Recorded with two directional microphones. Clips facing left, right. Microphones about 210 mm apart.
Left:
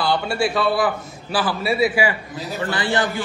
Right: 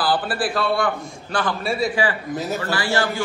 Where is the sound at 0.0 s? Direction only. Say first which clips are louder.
Left 1 dB; 5° right (ahead or behind).